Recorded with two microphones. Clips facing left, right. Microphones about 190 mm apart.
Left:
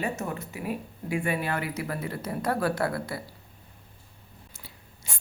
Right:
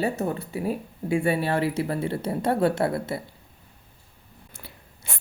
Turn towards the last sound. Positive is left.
turn(degrees=-60)  # may be behind; listen again after turning